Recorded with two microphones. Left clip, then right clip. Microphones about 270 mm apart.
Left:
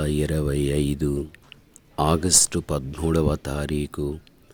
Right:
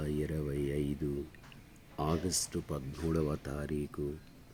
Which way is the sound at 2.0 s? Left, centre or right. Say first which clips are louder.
Left 14 dB; left.